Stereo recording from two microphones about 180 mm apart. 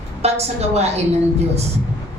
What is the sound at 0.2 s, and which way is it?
Speech, 35° right (ahead or behind).